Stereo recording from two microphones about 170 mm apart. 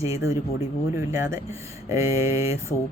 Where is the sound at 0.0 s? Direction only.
20° right (ahead or behind).